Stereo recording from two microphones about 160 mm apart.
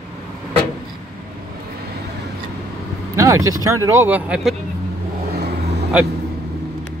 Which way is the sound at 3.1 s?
20° right (ahead or behind).